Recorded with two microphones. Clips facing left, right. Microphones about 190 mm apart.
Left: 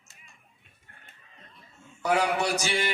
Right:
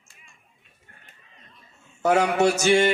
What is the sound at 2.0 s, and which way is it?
Speech, 45° right (ahead or behind).